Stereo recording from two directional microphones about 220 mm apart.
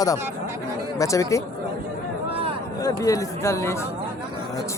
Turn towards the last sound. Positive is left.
turn(degrees=15)  # may be behind; listen again after turning